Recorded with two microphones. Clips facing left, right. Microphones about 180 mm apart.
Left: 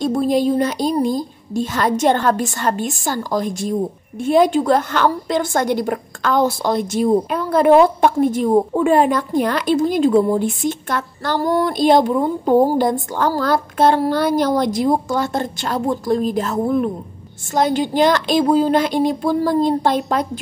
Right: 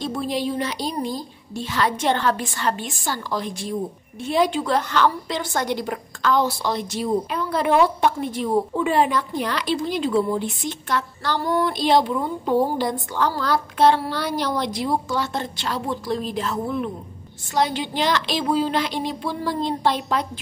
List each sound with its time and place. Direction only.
0.0 s a woman's voice: 45° left (ahead or behind)